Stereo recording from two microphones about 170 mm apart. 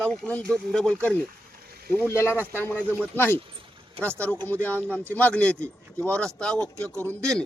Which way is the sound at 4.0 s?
35° right (ahead or behind).